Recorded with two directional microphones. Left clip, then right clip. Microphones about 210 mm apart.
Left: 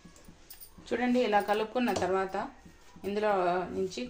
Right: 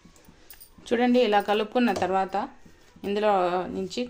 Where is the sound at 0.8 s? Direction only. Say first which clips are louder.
Right 7 dB; 50° right (ahead or behind).